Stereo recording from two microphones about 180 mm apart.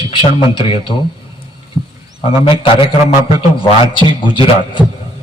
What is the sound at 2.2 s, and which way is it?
A man's voice, 30° left (ahead or behind).